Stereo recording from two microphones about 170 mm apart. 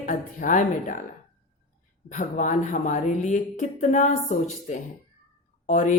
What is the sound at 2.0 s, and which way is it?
A woman's voice, 50° left (ahead or behind).